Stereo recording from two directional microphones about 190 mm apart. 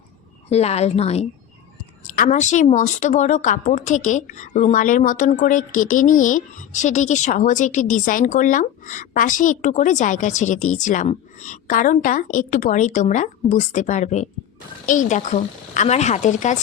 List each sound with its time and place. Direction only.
0.5 s speech: 35° left (ahead or behind)